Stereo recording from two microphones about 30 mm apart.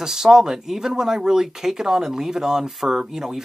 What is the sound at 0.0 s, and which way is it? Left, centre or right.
Speech, centre.